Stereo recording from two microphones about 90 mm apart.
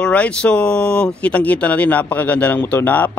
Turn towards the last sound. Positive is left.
turn(degrees=20)  # may be behind; listen again after turning